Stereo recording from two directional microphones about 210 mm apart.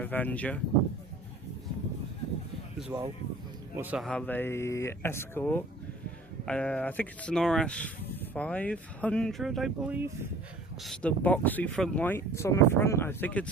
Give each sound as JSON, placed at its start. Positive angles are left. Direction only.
{"t": 0.0, "sound": "speech", "side_deg": 10}
{"t": 2.9, "sound": "speech", "side_deg": -20}
{"t": 3.8, "sound": "speech", "side_deg": -5}
{"t": 10.8, "sound": "speech", "side_deg": 5}